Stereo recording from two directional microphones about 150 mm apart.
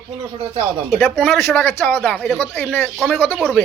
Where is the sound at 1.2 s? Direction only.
Centre (ahead or behind).